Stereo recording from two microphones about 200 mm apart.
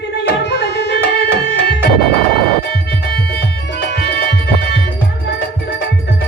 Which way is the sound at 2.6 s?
55° left (ahead or behind).